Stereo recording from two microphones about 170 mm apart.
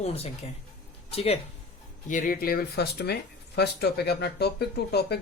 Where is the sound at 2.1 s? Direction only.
50° left (ahead or behind).